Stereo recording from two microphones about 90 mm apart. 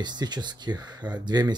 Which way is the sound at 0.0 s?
55° right (ahead or behind).